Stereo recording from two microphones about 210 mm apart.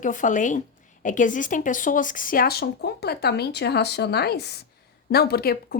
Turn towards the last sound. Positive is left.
turn(degrees=45)  # may be behind; listen again after turning